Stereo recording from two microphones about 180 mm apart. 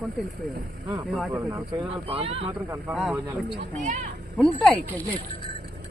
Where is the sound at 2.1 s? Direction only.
30° right (ahead or behind).